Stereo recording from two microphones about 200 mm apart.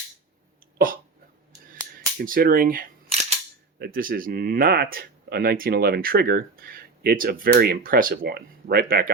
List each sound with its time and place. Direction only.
2.2 s speech: 45° right (ahead or behind)
3.8 s speech: 50° right (ahead or behind)